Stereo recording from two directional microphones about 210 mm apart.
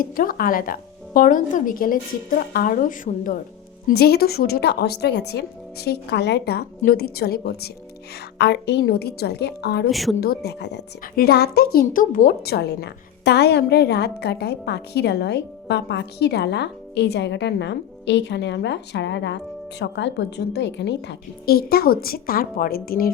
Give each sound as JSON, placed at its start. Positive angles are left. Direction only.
{"t": 0.0, "sound": "a woman's voice", "side_deg": 40}
{"t": 9.9, "sound": "a woman's voice", "side_deg": 0}
{"t": 10.2, "sound": "a woman's voice", "side_deg": 50}